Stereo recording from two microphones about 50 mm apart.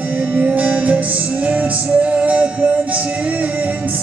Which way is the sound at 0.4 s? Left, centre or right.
Right.